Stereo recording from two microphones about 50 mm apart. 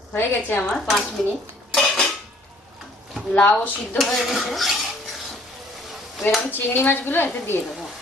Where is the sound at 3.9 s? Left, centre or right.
Centre.